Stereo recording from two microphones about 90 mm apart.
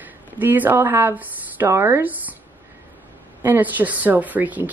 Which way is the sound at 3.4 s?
20° right (ahead or behind).